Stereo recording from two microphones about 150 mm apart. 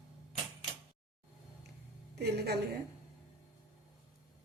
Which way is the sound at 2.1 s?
90° right.